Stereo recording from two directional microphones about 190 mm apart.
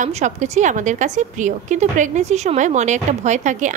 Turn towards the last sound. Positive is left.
turn(degrees=-40)  # may be behind; listen again after turning